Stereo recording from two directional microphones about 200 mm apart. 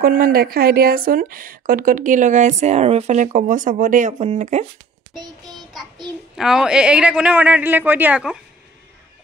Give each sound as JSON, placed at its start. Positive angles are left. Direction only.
{"t": 0.0, "sound": "speech", "side_deg": -45}
{"t": 5.7, "sound": "a child's voice", "side_deg": 0}